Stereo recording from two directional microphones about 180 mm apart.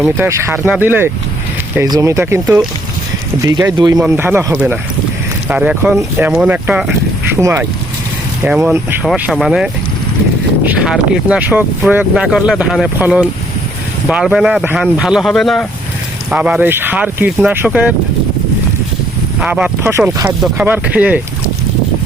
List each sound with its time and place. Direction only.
0.0 s speech: 15° right (ahead or behind)
19.4 s speech: 5° right (ahead or behind)